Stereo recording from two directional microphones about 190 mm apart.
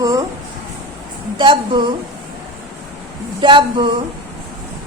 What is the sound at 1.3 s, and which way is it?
Speech, 25° right (ahead or behind).